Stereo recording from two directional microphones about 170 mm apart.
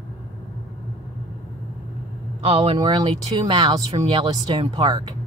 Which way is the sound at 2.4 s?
40° right (ahead or behind).